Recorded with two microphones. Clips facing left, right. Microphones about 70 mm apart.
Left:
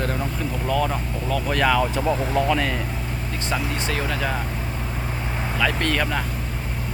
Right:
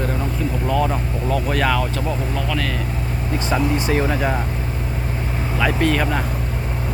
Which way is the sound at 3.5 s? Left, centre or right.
Right.